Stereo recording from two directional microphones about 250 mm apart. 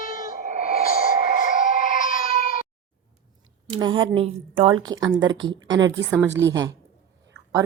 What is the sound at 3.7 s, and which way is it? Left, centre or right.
A woman's voice, centre.